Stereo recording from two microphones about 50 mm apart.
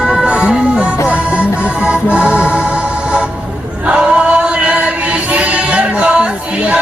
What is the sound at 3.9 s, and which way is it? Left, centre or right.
Chant, centre.